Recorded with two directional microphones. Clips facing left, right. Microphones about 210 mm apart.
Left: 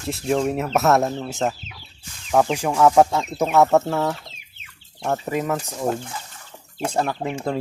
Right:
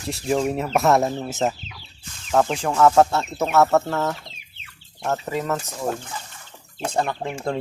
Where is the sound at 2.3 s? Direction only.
10° left (ahead or behind).